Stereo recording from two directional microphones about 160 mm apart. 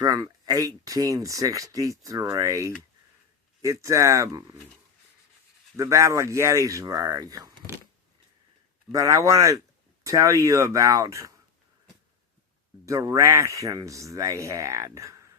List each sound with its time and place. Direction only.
0.0 s speech: 20° right (ahead or behind)
5.7 s speech: 20° right (ahead or behind)
8.9 s speech: 20° right (ahead or behind)
12.8 s speech: 20° right (ahead or behind)